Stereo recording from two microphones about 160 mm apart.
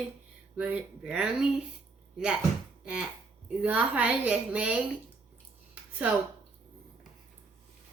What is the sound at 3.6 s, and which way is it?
A woman's voice, 10° right (ahead or behind).